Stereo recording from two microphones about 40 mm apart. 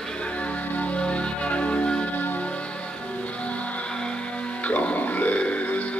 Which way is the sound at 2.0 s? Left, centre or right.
Left.